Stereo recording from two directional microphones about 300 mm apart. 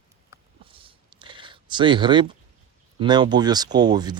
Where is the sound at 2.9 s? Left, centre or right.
Centre.